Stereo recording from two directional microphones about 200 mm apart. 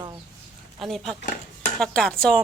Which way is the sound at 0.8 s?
Centre (ahead or behind).